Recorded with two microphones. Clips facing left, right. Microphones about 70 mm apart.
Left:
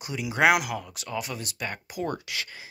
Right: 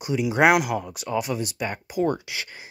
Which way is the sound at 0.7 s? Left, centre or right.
Centre.